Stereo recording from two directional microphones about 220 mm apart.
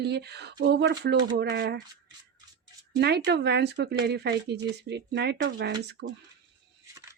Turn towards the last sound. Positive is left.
turn(degrees=-50)  # may be behind; listen again after turning